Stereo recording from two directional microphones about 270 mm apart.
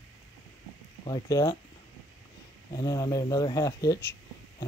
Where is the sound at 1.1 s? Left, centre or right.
Centre.